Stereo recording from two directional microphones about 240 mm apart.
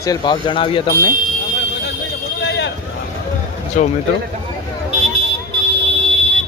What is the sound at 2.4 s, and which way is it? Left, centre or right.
Vehicle, left.